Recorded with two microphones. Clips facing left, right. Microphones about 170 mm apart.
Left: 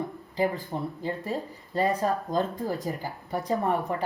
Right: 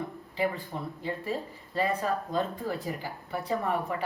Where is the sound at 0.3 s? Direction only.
40° left (ahead or behind).